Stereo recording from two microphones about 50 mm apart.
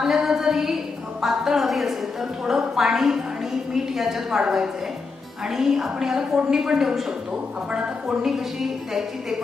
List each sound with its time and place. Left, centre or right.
0.0 s a sound: centre
1.2 s a woman's voice: centre
8.3 s a woman's voice: centre